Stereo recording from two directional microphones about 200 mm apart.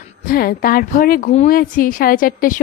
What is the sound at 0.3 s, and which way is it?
A woman's voice, 45° left (ahead or behind).